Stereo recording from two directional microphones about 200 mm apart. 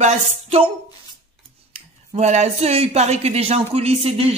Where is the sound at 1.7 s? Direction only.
35° right (ahead or behind).